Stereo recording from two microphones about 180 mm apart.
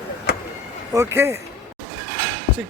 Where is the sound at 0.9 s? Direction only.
15° right (ahead or behind).